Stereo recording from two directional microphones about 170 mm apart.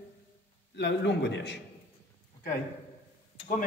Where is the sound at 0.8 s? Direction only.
90° left.